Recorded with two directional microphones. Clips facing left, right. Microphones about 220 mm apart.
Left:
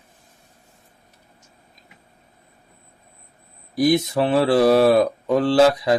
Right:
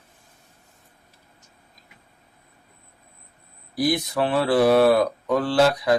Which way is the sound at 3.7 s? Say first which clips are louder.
Left 5 dB; 20° left (ahead or behind).